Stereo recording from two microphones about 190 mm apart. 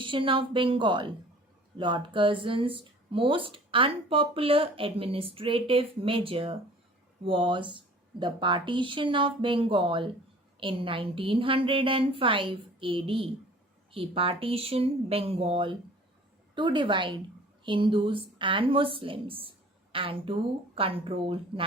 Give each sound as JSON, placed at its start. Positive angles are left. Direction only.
{"t": 0.0, "sound": "speech", "side_deg": -25}